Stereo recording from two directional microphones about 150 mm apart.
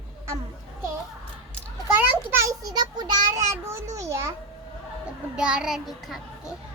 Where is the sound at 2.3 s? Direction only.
20° right (ahead or behind).